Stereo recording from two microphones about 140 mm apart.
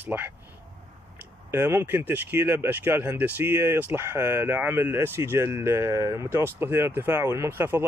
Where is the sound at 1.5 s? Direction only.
15° right (ahead or behind).